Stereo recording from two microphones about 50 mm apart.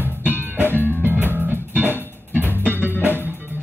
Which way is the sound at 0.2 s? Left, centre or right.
Right.